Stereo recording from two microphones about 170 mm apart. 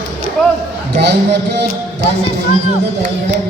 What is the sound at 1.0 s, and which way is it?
Speech, 80° right.